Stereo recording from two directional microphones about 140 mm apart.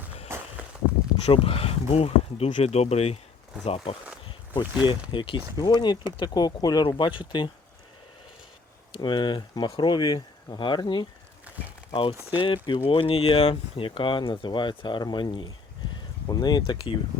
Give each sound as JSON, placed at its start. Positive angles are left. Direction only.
{"t": 0.3, "sound": "walk", "side_deg": -15}
{"t": 1.2, "sound": "speech", "side_deg": 45}
{"t": 4.6, "sound": "speech", "side_deg": -10}
{"t": 5.1, "sound": "speech", "side_deg": 35}
{"t": 8.9, "sound": "speech", "side_deg": 35}
{"t": 12.6, "sound": "speech", "side_deg": 35}
{"t": 15.8, "sound": "a sound", "side_deg": 30}
{"t": 16.3, "sound": "speech", "side_deg": 30}